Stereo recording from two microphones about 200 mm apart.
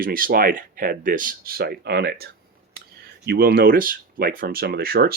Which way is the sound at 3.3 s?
50° right (ahead or behind).